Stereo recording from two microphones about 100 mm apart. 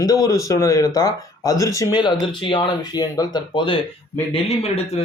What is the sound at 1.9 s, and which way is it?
Speech, 50° left (ahead or behind).